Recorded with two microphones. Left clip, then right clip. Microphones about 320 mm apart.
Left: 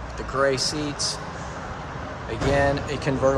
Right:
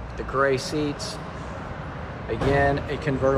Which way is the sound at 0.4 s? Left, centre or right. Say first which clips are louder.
Even; centre.